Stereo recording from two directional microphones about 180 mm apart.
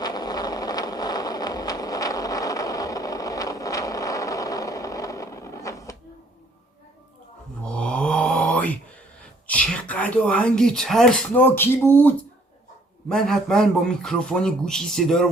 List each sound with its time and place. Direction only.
0.0 s vehicle: 20° left (ahead or behind)
7.6 s a sound: 5° left (ahead or behind)
9.5 s a man's voice: 10° left (ahead or behind)